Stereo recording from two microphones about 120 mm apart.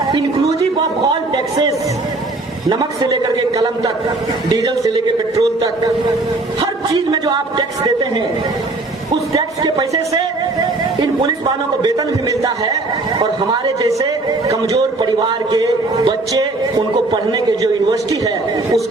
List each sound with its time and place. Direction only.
2.6 s a man's voice: 30° right (ahead or behind)
6.9 s a man's voice: 30° right (ahead or behind)
9.3 s a man's voice: 30° right (ahead or behind)
11.8 s a man's voice: 30° right (ahead or behind)
14.0 s a man's voice: 30° right (ahead or behind)